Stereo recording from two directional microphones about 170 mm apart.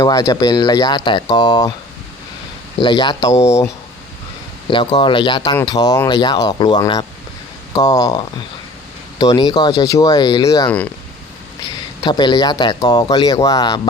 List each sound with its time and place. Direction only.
0.0 s speech: 20° left (ahead or behind)
2.8 s speech: 25° left (ahead or behind)
4.7 s speech: 25° left (ahead or behind)
9.2 s speech: 25° left (ahead or behind)
10.7 s speech: 10° left (ahead or behind)
12.0 s speech: 25° left (ahead or behind)